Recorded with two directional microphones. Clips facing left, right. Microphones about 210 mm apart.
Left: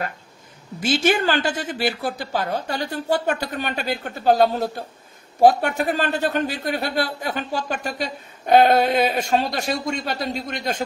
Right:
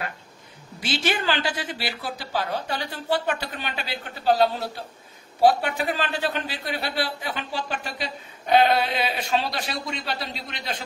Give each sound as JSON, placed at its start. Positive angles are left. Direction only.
{"t": 0.7, "sound": "a man's voice", "side_deg": 45}